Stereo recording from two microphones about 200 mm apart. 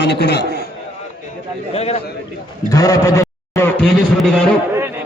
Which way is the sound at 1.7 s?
30° left (ahead or behind).